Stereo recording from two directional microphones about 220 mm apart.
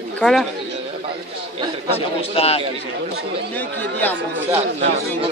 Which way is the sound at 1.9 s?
25° left (ahead or behind).